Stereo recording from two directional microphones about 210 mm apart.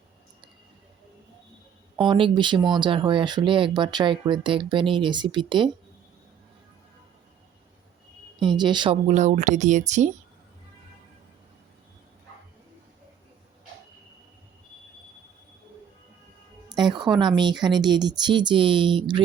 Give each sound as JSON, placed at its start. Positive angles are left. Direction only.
{"t": 2.0, "sound": "speech", "side_deg": -25}
{"t": 8.4, "sound": "speech", "side_deg": -20}
{"t": 9.0, "sound": "speech", "side_deg": -35}
{"t": 16.6, "sound": "music", "side_deg": -20}
{"t": 17.2, "sound": "speech", "side_deg": -20}